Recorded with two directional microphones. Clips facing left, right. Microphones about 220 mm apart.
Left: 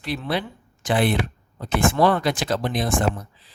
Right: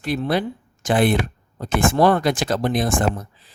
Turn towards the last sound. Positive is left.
turn(degrees=-50)  # may be behind; listen again after turning